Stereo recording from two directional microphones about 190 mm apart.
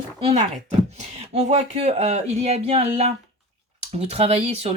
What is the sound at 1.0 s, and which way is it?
Speech, 35° right (ahead or behind).